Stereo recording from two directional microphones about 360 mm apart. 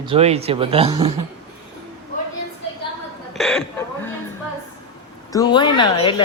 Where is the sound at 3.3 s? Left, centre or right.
Centre.